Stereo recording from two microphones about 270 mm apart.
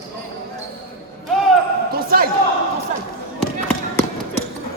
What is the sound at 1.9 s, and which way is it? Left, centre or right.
Basketball bounce, right.